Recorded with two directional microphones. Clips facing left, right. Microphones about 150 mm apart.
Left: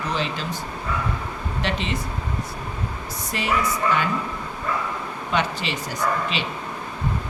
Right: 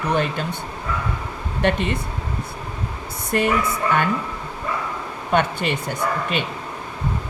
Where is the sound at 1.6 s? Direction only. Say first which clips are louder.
Right 7 dB; 55° right (ahead or behind).